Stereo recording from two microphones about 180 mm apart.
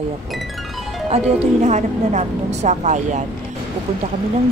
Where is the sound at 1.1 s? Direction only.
40° right (ahead or behind).